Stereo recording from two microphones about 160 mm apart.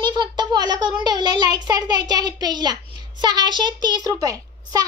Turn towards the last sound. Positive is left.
turn(degrees=-20)  # may be behind; listen again after turning